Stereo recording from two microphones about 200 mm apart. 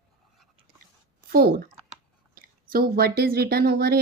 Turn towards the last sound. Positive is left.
turn(degrees=-50)  # may be behind; listen again after turning